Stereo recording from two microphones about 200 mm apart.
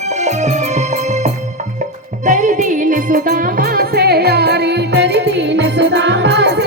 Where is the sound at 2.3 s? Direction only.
40° right (ahead or behind).